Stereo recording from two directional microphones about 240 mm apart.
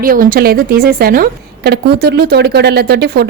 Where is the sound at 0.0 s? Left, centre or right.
Right.